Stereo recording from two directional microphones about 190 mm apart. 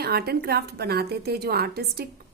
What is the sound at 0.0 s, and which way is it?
A woman's voice, 55° right (ahead or behind).